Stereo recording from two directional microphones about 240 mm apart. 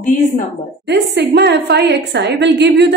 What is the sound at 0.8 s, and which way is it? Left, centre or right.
Speech, right.